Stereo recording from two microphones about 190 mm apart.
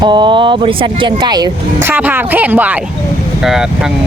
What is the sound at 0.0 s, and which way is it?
Speech, 25° right (ahead or behind).